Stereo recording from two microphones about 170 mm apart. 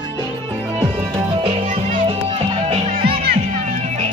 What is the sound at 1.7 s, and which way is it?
Music, 40° right (ahead or behind).